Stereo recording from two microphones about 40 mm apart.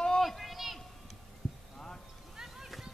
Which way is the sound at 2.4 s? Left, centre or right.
Centre.